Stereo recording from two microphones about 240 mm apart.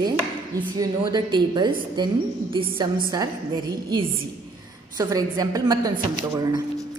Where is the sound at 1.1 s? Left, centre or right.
Centre.